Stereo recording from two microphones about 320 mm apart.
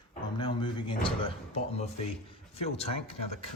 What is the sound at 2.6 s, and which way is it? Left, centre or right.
Speech, centre.